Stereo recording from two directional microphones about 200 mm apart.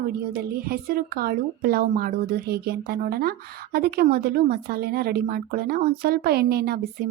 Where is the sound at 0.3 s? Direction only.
50° right (ahead or behind).